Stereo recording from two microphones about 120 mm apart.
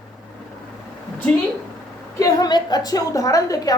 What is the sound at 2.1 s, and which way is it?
A woman's voice, 30° left (ahead or behind).